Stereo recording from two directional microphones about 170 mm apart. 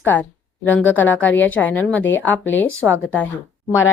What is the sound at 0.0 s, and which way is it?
Speech, 10° left (ahead or behind).